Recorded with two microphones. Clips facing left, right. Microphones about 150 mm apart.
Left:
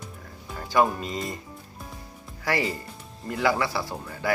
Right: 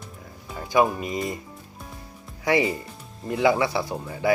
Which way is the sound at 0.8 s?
10° right (ahead or behind).